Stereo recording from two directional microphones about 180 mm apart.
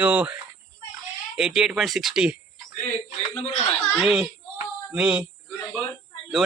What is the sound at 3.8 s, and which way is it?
A man's voice, centre (ahead or behind).